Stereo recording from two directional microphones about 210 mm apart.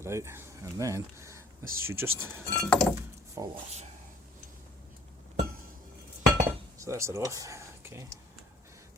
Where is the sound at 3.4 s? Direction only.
15° right (ahead or behind).